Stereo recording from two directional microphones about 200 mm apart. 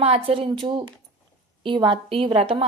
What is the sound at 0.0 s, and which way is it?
A woman's voice, 30° right (ahead or behind).